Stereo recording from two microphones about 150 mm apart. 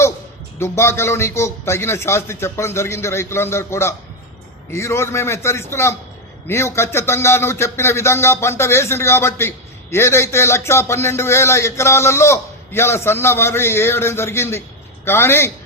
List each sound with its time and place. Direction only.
0.6 s speech: 15° left (ahead or behind)